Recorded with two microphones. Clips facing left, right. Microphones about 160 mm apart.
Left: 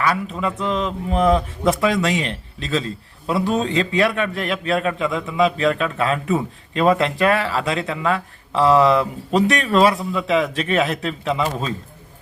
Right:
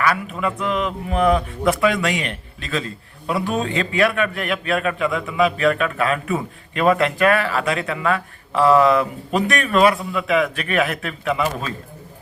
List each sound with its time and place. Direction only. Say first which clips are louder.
0.0 s speech: even; 25° left (ahead or behind)